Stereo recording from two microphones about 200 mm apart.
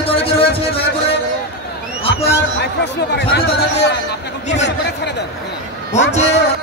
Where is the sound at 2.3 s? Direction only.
60° left (ahead or behind).